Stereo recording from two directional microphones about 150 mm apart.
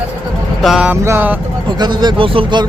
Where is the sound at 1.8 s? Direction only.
30° right (ahead or behind).